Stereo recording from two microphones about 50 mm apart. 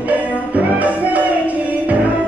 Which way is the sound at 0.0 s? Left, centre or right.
Right.